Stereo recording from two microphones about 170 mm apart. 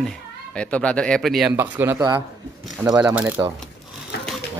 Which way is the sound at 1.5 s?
10° right (ahead or behind).